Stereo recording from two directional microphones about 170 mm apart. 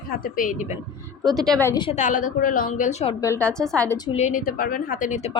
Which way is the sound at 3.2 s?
15° left (ahead or behind).